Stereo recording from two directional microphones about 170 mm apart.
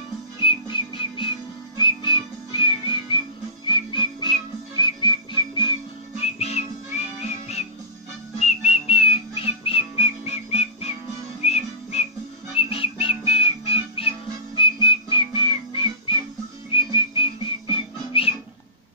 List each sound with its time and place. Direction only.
0.4 s whistling: 30° left (ahead or behind)
3.6 s music: 30° left (ahead or behind)
7.2 s whistling: 40° left (ahead or behind)
12.5 s music: 30° left (ahead or behind)
16.7 s whistling: 30° left (ahead or behind)